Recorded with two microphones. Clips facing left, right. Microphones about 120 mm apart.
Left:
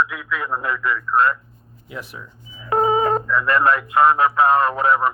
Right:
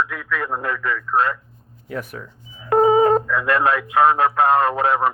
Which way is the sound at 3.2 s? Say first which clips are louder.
Left 1 dB; 65° right (ahead or behind).